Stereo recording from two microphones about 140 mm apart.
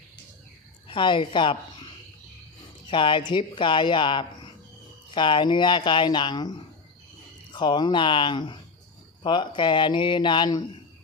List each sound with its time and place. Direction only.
0.9 s a woman's voice: 35° left (ahead or behind)
2.9 s speech: 35° left (ahead or behind)
7.5 s speech: 35° left (ahead or behind)